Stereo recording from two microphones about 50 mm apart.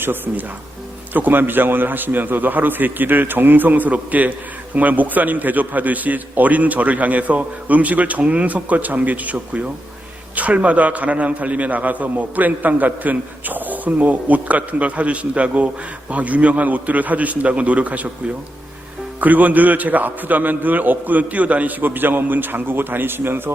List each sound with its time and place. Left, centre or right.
0.0 s a man's voice: right
19.2 s a man's voice: right